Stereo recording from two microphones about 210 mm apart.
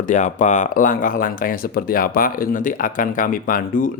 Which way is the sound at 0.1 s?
35° left (ahead or behind).